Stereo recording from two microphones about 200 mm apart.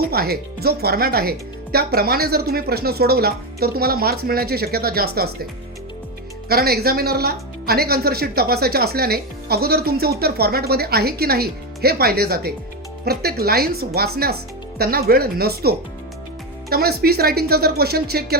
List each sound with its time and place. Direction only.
0.1 s speech: 50° right (ahead or behind)
6.5 s speech: 50° right (ahead or behind)